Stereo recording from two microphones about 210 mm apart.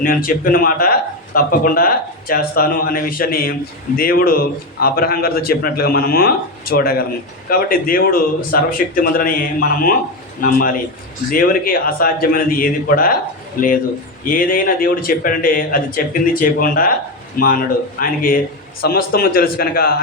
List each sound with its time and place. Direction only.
0.0 s a man's voice: 40° left (ahead or behind)